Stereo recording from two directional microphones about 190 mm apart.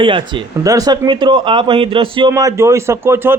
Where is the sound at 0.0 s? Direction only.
25° right (ahead or behind).